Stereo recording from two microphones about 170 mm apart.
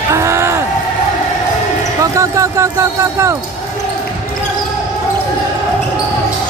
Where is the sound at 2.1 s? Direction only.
20° right (ahead or behind).